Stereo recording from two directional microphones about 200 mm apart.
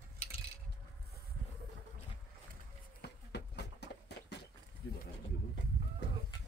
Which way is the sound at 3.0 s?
55° left (ahead or behind).